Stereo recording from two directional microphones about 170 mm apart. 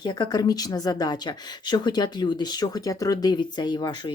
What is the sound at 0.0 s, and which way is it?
A woman's voice, 25° left (ahead or behind).